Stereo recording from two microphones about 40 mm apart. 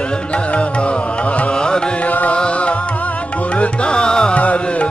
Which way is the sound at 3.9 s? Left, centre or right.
Left.